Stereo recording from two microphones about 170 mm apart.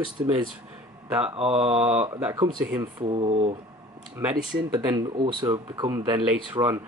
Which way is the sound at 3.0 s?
35° right (ahead or behind).